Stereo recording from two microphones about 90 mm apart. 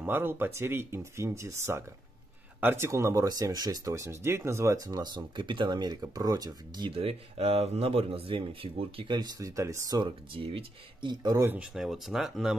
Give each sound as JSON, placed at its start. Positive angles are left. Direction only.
{"t": 0.0, "sound": "speech", "side_deg": -25}
{"t": 6.9, "sound": "speech", "side_deg": -90}
{"t": 9.1, "sound": "speech", "side_deg": -50}
{"t": 9.6, "sound": "speech", "side_deg": -35}
{"t": 9.9, "sound": "speech", "side_deg": -65}
{"t": 11.4, "sound": "speech", "side_deg": -15}
{"t": 11.7, "sound": "speech", "side_deg": -5}